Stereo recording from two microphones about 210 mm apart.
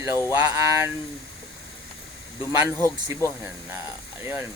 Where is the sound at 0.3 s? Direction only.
15° right (ahead or behind).